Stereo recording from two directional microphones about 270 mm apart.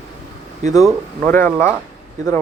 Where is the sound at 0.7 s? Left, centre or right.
Centre.